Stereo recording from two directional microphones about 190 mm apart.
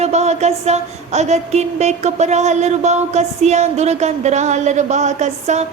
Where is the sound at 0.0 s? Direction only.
35° right (ahead or behind).